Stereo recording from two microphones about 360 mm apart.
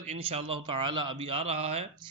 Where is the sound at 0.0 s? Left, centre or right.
Centre.